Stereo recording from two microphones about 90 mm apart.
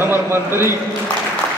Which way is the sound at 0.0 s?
25° right (ahead or behind).